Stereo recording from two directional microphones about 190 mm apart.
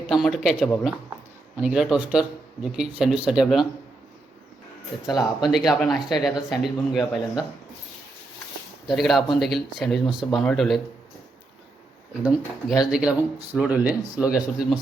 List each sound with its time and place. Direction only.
0.1 s speech: centre (ahead or behind)
4.9 s speech: centre (ahead or behind)
8.9 s speech: centre (ahead or behind)
12.2 s speech: centre (ahead or behind)